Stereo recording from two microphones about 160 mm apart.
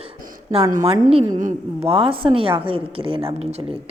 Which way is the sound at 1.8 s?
35° right (ahead or behind).